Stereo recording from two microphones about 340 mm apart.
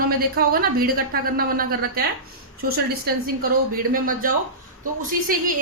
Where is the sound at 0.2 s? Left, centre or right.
Right.